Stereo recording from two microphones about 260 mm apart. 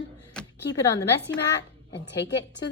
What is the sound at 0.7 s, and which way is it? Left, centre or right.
Speech, centre.